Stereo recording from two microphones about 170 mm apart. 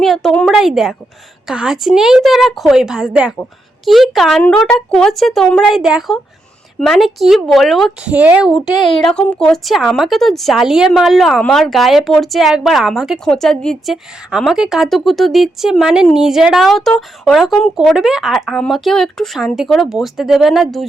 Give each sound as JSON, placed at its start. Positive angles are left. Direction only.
{"t": 0.0, "sound": "speech", "side_deg": 0}
{"t": 8.7, "sound": "a child's voice", "side_deg": 30}
{"t": 9.0, "sound": "speech", "side_deg": 0}